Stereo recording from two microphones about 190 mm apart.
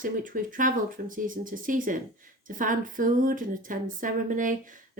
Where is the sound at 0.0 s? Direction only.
45° right (ahead or behind).